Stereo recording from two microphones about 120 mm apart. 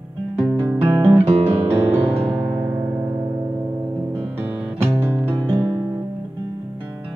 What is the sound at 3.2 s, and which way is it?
Music, 30° right (ahead or behind).